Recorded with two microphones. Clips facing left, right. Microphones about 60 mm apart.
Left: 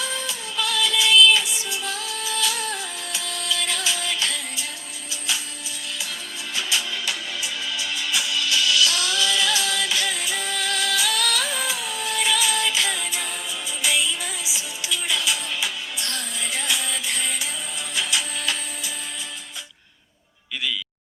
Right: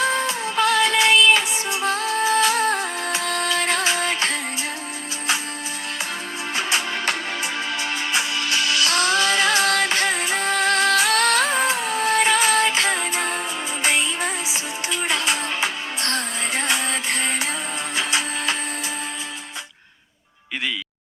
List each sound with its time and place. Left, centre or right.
0.0 s music: right
6.6 s music: right